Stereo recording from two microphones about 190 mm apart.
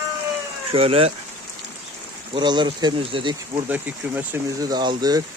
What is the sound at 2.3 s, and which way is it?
Speech, 25° right (ahead or behind).